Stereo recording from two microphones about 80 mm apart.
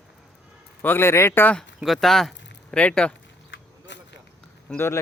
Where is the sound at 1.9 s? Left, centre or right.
Centre.